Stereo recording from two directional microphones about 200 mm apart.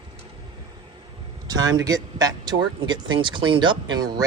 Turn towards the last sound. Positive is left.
turn(degrees=-20)  # may be behind; listen again after turning